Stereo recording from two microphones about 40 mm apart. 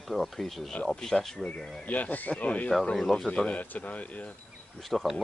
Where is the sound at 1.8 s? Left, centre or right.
Left.